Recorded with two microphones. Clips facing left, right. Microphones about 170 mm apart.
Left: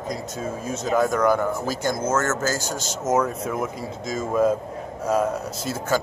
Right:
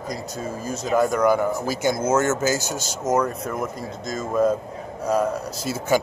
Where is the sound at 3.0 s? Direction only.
5° left (ahead or behind).